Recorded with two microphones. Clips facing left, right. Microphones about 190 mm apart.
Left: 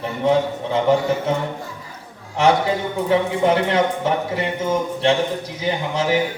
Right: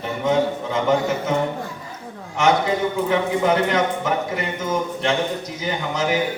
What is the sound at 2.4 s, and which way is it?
A man's voice, 30° left (ahead or behind).